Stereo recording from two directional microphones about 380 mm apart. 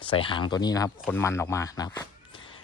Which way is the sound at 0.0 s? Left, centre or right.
Centre.